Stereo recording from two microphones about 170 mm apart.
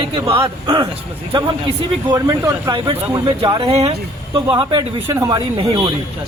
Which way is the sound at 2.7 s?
30° right (ahead or behind).